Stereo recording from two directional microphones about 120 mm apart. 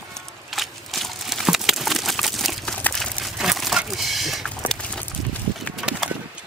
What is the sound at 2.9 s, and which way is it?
Crumpling, centre (ahead or behind).